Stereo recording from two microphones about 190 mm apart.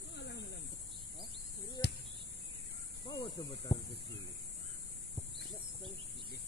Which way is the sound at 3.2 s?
25° left (ahead or behind).